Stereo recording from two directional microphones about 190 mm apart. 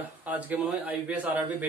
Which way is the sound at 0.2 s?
10° right (ahead or behind).